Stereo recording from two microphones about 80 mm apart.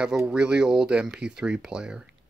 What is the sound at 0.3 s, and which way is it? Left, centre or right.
Speech, centre.